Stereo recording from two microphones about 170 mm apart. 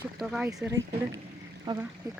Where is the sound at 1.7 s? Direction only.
25° right (ahead or behind).